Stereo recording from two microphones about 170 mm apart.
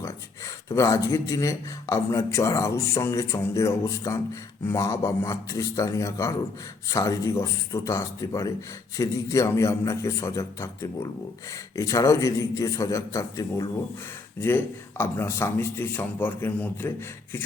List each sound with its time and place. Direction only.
0.0 s a man's voice: 20° left (ahead or behind)